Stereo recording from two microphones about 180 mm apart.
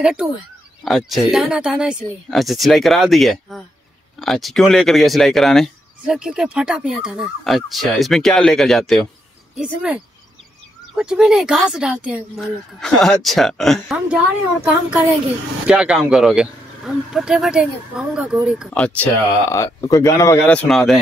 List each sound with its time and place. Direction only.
0.0 s speech: 5° right (ahead or behind)
19.5 s speech: 20° left (ahead or behind); by 21.0 s centre (ahead or behind)